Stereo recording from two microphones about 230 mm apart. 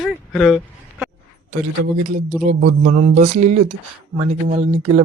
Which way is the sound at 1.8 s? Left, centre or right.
Right.